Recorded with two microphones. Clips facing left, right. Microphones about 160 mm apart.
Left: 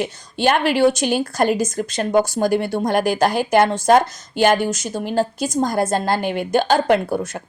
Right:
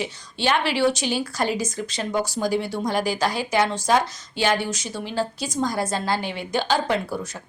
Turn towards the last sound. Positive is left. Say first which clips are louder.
# left 7 dB
turn(degrees=55)  # may be behind; listen again after turning